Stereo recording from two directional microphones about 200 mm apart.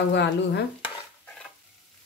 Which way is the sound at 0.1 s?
60° left (ahead or behind).